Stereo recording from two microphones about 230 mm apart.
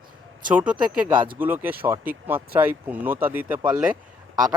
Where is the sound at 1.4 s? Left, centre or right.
Centre.